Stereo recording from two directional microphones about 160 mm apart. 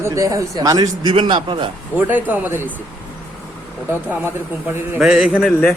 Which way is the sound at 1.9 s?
10° right (ahead or behind).